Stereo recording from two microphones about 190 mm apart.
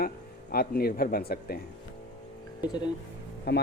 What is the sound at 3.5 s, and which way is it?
Speech, 60° left (ahead or behind).